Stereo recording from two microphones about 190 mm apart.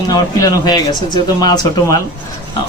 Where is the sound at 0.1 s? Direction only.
20° left (ahead or behind).